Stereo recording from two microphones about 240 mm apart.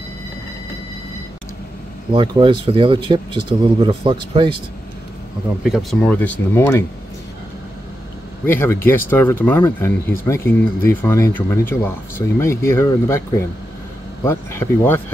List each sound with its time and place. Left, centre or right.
2.1 s speech: centre
5.6 s speech: centre
8.5 s speech: centre